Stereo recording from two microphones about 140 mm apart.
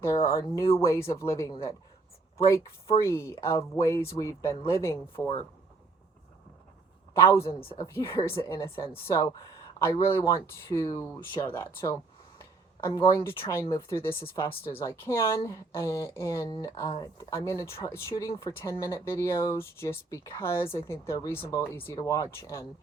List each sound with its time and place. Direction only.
0.0 s speech: 20° left (ahead or behind)
3.0 s speech: 20° left (ahead or behind)
7.2 s speech: 20° left (ahead or behind)